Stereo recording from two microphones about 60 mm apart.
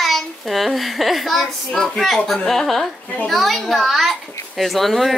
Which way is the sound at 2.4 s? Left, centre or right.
Centre.